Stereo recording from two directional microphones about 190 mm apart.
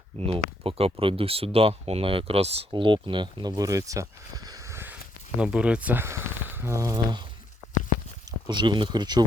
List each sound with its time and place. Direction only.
0.2 s speech: 30° right (ahead or behind)
4.4 s a sound: 15° right (ahead or behind)
5.4 s speech: 5° right (ahead or behind)
8.4 s speech: 25° right (ahead or behind)